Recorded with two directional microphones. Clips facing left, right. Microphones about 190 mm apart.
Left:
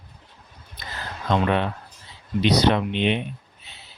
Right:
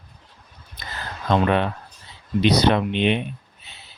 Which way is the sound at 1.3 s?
55° right (ahead or behind).